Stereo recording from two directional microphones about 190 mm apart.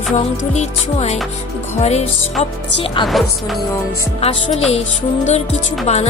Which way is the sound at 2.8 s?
25° left (ahead or behind).